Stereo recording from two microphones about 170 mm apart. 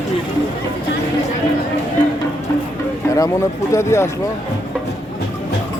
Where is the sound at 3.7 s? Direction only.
15° left (ahead or behind).